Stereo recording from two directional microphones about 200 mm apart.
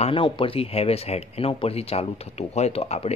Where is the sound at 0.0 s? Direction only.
25° left (ahead or behind).